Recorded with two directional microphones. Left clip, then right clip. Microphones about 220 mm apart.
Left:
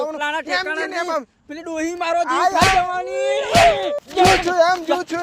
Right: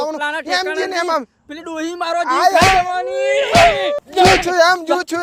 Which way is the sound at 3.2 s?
25° right (ahead or behind).